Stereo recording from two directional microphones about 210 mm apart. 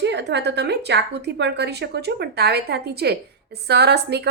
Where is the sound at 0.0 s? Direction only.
55° right (ahead or behind).